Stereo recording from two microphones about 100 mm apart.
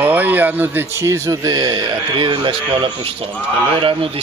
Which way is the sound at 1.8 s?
60° right (ahead or behind).